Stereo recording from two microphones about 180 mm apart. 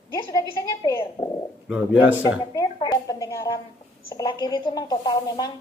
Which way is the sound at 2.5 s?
20° left (ahead or behind).